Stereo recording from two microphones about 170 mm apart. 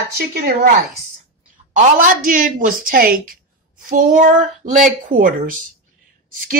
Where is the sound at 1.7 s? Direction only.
50° right (ahead or behind).